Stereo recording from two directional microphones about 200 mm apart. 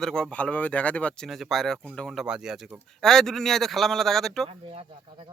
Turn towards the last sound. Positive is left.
turn(degrees=-30)  # may be behind; listen again after turning